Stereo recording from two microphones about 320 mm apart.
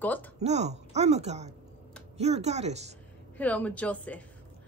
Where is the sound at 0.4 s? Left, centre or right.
Right.